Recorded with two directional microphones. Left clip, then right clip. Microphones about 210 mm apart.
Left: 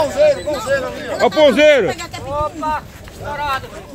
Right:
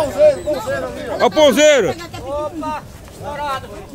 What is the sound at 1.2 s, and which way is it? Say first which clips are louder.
Speech: even; 5° right (ahead or behind).